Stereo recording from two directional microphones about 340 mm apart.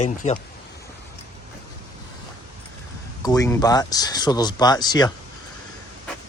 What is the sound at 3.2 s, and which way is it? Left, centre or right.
Speech, centre.